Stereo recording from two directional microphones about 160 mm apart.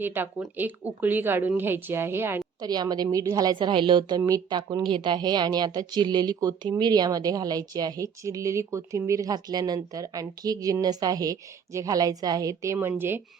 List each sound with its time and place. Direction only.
0.0 s a woman's voice: 10° right (ahead or behind)
2.6 s a woman's voice: 25° right (ahead or behind)